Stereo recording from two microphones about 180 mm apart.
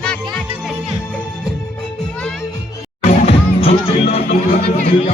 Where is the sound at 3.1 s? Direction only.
35° left (ahead or behind).